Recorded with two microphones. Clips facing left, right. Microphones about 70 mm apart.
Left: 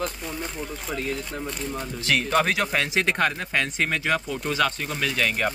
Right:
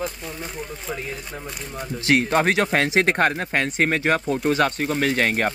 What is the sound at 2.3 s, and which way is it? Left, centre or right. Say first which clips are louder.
Speech: right 3 dB; right.